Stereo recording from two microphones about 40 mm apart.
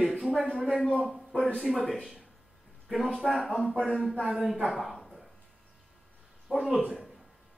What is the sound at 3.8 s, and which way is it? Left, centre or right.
Speech, left.